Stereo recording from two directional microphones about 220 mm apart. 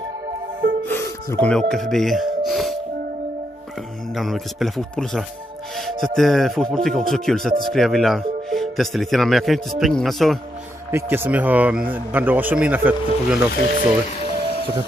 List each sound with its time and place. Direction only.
0.8 s speech: 10° left (ahead or behind)
4.1 s speech: centre (ahead or behind)
10.9 s a man's voice: 10° right (ahead or behind)
14.1 s music: 30° left (ahead or behind)